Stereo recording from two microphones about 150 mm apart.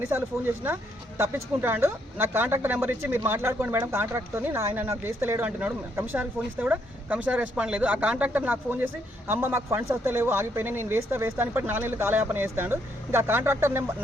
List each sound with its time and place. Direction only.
1.2 s speech: 15° right (ahead or behind)